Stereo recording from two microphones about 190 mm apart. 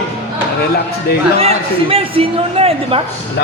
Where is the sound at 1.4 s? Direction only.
30° right (ahead or behind).